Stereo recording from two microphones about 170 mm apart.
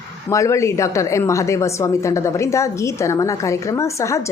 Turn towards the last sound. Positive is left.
turn(degrees=15)  # may be behind; listen again after turning